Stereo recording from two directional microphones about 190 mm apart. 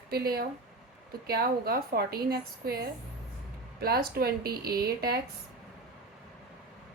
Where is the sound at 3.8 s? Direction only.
55° right (ahead or behind).